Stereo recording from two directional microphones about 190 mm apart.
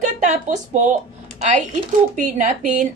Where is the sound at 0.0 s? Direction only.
40° right (ahead or behind).